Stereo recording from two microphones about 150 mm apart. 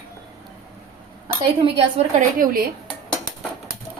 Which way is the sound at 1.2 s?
35° right (ahead or behind).